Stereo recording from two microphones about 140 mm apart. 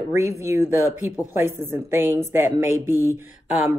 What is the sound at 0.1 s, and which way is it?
Speech, 20° right (ahead or behind).